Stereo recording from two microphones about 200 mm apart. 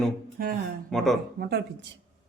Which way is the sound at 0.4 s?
45° right (ahead or behind).